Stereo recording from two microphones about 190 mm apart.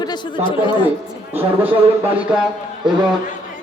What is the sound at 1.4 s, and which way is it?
Speech, 10° right (ahead or behind).